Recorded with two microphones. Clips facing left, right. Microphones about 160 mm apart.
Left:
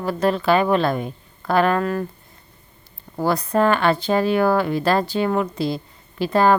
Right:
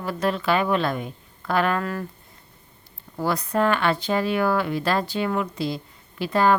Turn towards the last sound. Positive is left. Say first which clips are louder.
# left 3 dB
turn(degrees=40)  # may be behind; listen again after turning